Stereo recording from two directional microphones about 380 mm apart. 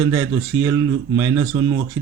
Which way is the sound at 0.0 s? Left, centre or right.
Centre.